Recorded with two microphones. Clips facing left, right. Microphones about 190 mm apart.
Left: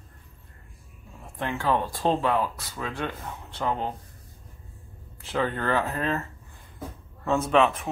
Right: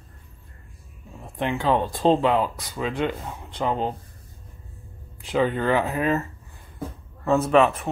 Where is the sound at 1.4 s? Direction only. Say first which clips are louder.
Right 4 dB; 20° right (ahead or behind).